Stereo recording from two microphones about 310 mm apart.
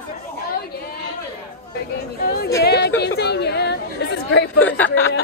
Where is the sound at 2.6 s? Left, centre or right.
Left.